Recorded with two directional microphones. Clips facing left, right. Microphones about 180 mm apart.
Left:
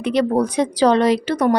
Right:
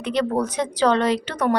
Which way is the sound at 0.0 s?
10° left (ahead or behind).